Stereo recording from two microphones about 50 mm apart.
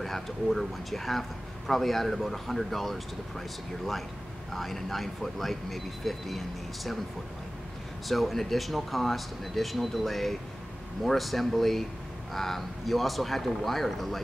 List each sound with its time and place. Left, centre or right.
0.0 s speech: centre
8.1 s speech: centre